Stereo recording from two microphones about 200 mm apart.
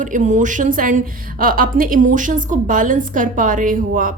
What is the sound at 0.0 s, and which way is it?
A woman's voice, 40° right (ahead or behind).